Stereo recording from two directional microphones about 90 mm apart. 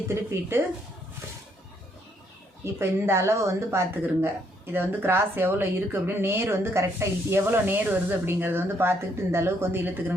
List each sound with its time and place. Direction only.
0.1 s speech: 30° right (ahead or behind)
2.7 s speech: 30° right (ahead or behind)